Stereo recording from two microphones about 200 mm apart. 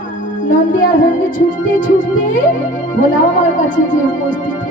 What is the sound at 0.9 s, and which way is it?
Speech, 40° left (ahead or behind).